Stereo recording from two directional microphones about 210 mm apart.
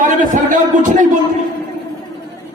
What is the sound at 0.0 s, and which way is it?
Speech, 40° right (ahead or behind).